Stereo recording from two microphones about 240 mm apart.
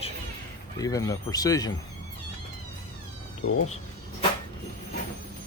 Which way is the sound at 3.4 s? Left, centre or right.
Left.